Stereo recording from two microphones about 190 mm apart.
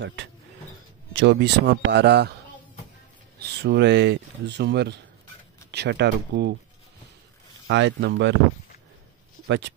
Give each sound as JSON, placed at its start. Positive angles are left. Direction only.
{"t": 0.0, "sound": "speech", "side_deg": -70}
{"t": 3.3, "sound": "speech", "side_deg": -60}
{"t": 7.6, "sound": "speech", "side_deg": -70}
{"t": 9.5, "sound": "speech", "side_deg": -70}